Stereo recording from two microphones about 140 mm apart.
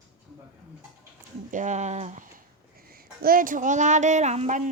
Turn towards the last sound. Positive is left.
turn(degrees=-55)  # may be behind; listen again after turning